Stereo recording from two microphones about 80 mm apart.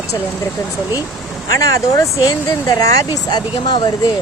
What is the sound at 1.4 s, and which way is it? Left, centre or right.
Speech, left.